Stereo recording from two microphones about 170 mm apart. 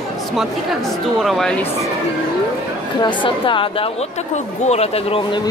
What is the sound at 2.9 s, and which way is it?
Speech, 30° left (ahead or behind).